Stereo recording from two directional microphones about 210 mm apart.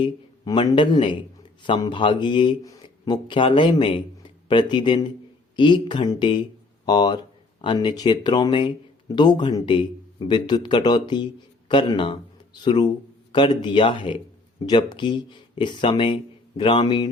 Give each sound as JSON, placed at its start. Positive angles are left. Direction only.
{"t": 0.0, "sound": "a man's voice", "side_deg": 20}